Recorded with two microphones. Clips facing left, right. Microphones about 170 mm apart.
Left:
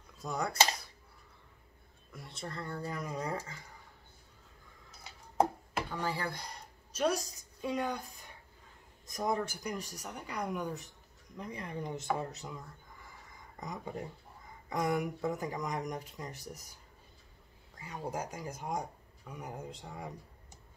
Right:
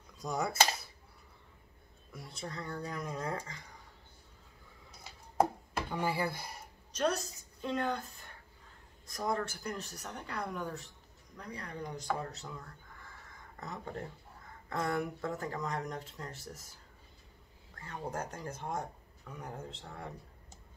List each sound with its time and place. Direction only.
0.2 s speech: centre (ahead or behind)
2.1 s speech: centre (ahead or behind)
5.9 s speech: 10° right (ahead or behind)
7.0 s a woman's voice: 10° left (ahead or behind)
17.7 s speech: 10° left (ahead or behind)